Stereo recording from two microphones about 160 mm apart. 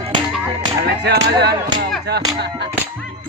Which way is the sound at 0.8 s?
90° right.